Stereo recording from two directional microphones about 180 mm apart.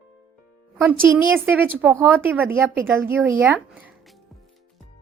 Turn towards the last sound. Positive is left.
turn(degrees=-5)  # may be behind; listen again after turning